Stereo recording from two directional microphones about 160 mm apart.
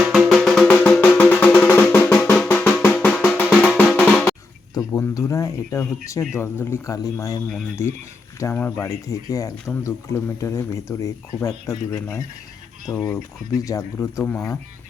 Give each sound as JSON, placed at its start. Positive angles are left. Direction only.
{"t": 0.1, "sound": "music", "side_deg": 0}
{"t": 4.0, "sound": "drum", "side_deg": 10}
{"t": 4.9, "sound": "a sound", "side_deg": 20}
{"t": 7.8, "sound": "speech", "side_deg": 15}
{"t": 13.7, "sound": "speech", "side_deg": 20}